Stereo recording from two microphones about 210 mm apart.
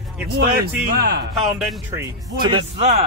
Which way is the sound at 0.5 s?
45° right (ahead or behind).